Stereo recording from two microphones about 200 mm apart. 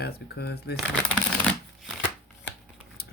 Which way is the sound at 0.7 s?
5° left (ahead or behind).